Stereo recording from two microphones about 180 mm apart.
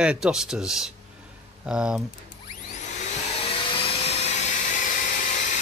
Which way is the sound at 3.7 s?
30° left (ahead or behind).